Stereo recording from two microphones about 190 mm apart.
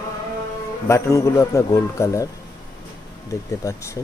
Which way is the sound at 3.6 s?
15° left (ahead or behind).